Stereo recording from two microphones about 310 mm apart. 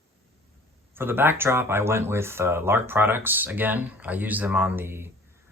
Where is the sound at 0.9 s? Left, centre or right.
Centre.